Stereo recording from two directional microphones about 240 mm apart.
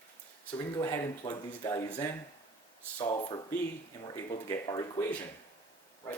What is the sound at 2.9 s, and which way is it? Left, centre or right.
Speech, left.